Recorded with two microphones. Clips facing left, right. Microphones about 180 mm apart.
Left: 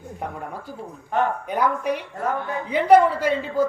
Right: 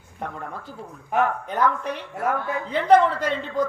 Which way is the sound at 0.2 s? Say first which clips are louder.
Even; 10° left (ahead or behind).